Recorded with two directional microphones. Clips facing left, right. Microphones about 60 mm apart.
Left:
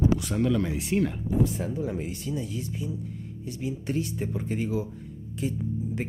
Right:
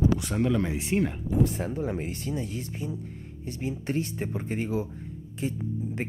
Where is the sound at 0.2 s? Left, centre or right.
Right.